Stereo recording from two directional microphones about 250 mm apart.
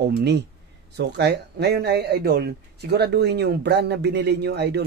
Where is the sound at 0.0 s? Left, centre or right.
Right.